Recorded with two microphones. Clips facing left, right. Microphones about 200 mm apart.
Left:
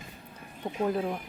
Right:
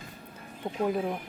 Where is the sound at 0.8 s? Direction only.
5° right (ahead or behind).